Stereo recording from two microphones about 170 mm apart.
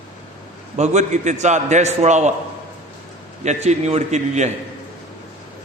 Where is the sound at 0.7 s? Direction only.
45° right (ahead or behind).